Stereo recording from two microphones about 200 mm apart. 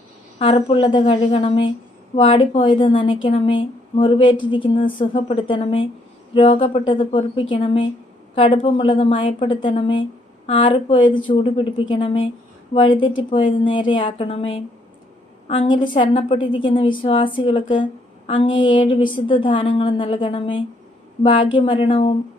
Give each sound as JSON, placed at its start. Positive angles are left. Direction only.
{"t": 0.4, "sound": "speech", "side_deg": 25}